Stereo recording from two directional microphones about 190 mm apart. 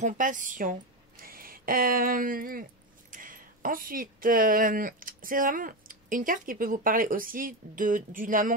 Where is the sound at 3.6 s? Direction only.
45° right (ahead or behind).